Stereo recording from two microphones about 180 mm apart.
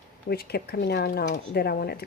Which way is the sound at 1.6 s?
60° left (ahead or behind).